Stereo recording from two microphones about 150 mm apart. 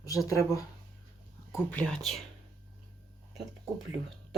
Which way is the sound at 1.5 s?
10° left (ahead or behind).